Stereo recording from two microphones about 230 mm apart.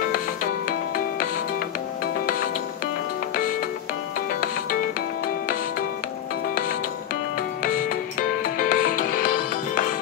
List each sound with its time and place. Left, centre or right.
0.4 s music: left
4.3 s music: left
7.6 s music: left